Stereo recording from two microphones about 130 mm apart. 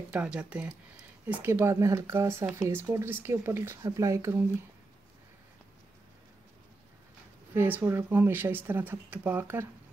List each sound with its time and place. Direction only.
0.1 s speech: 10° right (ahead or behind)
7.5 s speech: 15° right (ahead or behind)